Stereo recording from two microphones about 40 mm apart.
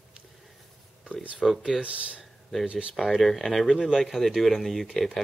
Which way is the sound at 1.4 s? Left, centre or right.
Centre.